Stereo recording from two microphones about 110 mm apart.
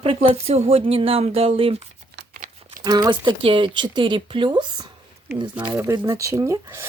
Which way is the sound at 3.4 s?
50° right (ahead or behind).